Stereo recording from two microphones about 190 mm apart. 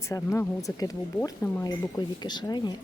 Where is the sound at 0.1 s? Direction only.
15° left (ahead or behind).